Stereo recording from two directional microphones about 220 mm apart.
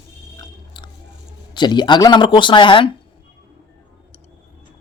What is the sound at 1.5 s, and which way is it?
Speech, 20° left (ahead or behind).